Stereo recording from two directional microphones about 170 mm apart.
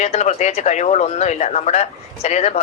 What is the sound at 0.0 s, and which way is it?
Speech, 40° left (ahead or behind).